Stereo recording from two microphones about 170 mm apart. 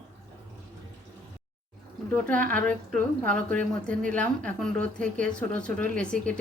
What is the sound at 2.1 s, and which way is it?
A woman's voice, 10° left (ahead or behind).